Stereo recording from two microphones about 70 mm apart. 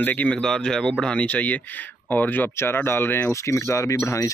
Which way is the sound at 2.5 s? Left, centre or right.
Left.